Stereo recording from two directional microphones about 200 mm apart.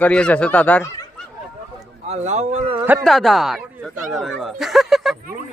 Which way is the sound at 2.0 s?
35° right (ahead or behind).